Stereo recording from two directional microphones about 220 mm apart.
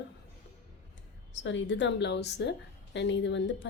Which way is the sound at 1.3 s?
55° left (ahead or behind).